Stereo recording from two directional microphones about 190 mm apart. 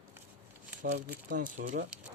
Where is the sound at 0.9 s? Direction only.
45° right (ahead or behind).